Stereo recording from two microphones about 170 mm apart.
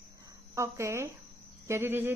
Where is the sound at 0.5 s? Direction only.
15° right (ahead or behind).